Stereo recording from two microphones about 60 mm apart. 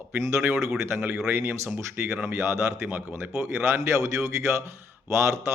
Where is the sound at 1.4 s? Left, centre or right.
Right.